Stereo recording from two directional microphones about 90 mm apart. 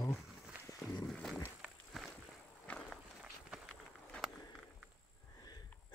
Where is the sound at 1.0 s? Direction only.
5° left (ahead or behind).